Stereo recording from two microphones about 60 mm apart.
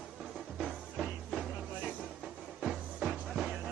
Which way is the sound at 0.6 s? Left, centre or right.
Centre.